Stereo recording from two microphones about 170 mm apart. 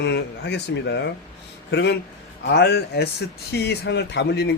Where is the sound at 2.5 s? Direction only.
70° left (ahead or behind).